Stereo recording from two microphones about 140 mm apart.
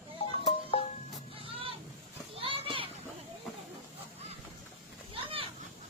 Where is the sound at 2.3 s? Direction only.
40° right (ahead or behind).